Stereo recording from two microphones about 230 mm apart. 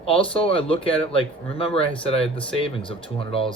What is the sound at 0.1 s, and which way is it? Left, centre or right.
Speech, left.